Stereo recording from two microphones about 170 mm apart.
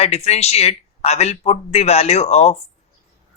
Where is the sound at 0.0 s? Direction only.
40° left (ahead or behind).